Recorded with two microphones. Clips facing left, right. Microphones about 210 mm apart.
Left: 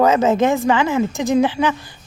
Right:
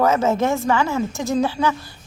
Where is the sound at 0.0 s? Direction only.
15° left (ahead or behind).